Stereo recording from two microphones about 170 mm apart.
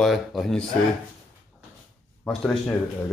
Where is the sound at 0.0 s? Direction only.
Centre (ahead or behind).